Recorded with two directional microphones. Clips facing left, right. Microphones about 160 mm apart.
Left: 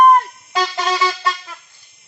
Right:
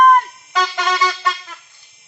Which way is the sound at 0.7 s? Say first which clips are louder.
Even; 10° left (ahead or behind).